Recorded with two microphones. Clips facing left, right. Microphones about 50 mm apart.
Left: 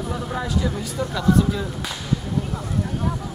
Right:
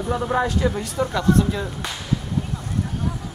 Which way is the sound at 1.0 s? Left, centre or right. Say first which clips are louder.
Right 4 dB; centre.